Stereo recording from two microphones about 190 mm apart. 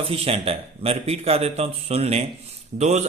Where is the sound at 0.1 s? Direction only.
30° right (ahead or behind).